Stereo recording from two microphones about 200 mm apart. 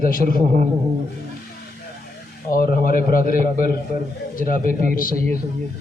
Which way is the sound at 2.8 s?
45° left (ahead or behind).